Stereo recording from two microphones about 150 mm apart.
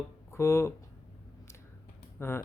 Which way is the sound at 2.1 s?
15° left (ahead or behind).